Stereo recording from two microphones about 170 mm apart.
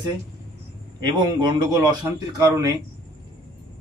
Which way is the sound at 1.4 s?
25° right (ahead or behind).